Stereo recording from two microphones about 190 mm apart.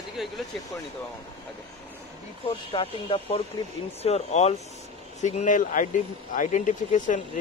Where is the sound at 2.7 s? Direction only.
30° left (ahead or behind).